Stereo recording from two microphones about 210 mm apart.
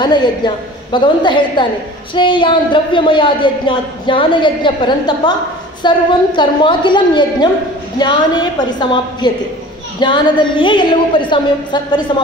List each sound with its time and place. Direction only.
0.0 s a woman's voice: 20° left (ahead or behind)